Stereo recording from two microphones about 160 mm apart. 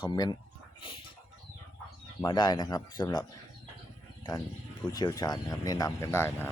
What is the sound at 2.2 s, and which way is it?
Speech, 25° left (ahead or behind).